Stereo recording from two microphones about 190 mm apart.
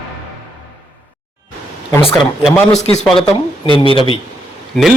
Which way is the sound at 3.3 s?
25° left (ahead or behind).